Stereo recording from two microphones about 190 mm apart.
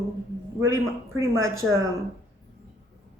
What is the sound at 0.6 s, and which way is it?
A woman's voice, 15° right (ahead or behind).